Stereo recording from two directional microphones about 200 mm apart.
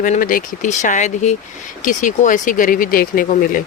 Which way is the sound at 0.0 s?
40° left (ahead or behind).